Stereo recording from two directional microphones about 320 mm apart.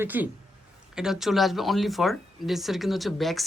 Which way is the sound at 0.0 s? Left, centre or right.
Centre.